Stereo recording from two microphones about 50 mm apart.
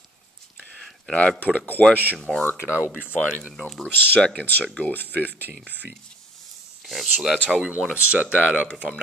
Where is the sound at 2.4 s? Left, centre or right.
Left.